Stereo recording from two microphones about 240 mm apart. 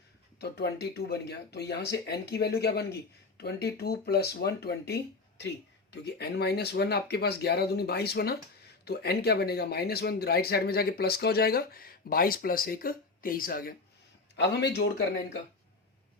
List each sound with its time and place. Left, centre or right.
0.3 s speech: left